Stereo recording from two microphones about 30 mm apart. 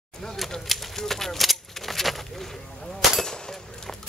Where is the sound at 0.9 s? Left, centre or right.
Centre.